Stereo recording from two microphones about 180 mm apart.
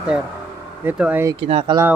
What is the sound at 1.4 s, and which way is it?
Speech, 30° right (ahead or behind).